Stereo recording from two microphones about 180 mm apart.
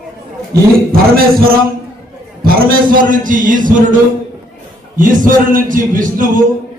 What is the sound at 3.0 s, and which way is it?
A man's voice, 50° right (ahead or behind).